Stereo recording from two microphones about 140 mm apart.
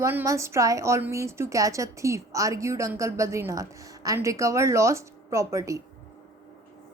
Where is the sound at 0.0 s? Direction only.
20° right (ahead or behind).